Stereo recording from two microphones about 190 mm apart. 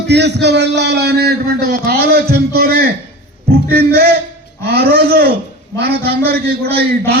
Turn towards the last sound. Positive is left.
turn(degrees=-55)  # may be behind; listen again after turning